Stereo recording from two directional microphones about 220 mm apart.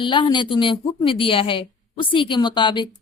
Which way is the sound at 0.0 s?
20° left (ahead or behind).